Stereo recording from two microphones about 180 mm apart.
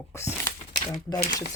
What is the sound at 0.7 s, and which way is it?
Speech, 25° left (ahead or behind).